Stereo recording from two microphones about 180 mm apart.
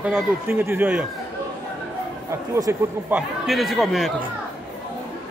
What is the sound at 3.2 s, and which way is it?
Speech, centre (ahead or behind).